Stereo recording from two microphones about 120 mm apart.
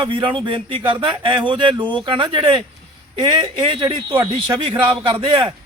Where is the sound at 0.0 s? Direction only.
45° right (ahead or behind).